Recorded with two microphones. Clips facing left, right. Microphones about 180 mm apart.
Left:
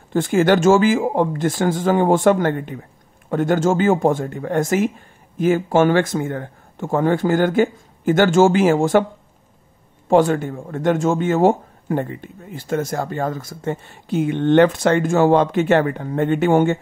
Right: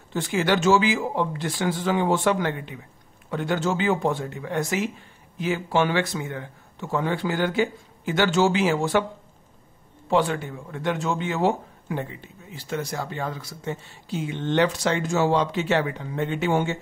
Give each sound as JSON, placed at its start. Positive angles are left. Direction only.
{"t": 0.1, "sound": "a man's voice", "side_deg": 50}
{"t": 10.0, "sound": "a man's voice", "side_deg": 45}